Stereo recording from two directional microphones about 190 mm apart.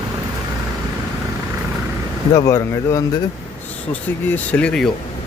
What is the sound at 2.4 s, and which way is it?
Speech, 15° left (ahead or behind).